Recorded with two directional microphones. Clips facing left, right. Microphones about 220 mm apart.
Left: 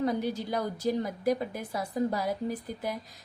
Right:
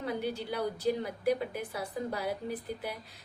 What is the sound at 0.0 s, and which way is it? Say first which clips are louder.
A woman's voice: left 5 dB; 40° left (ahead or behind).